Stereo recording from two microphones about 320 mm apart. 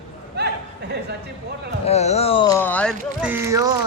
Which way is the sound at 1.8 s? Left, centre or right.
Centre.